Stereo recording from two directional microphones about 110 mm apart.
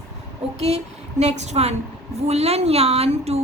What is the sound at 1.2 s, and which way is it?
Speech, 90° right.